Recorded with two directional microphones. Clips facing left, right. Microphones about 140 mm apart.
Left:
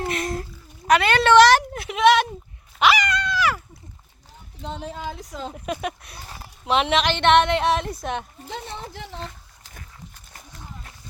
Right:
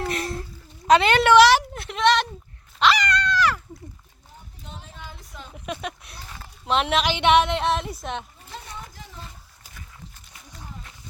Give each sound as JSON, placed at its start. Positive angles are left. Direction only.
{"t": 0.1, "sound": "a sound", "side_deg": -35}
{"t": 0.9, "sound": "a woman's voice", "side_deg": -20}
{"t": 2.7, "sound": "dog", "side_deg": 5}
{"t": 4.6, "sound": "speech", "side_deg": 90}
{"t": 5.5, "sound": "a woman's voice", "side_deg": 0}
{"t": 8.6, "sound": "speech", "side_deg": 25}
{"t": 8.9, "sound": "speech", "side_deg": 75}
{"t": 9.6, "sound": "a sound", "side_deg": -10}